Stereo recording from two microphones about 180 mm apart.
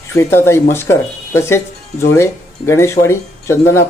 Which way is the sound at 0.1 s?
15° left (ahead or behind).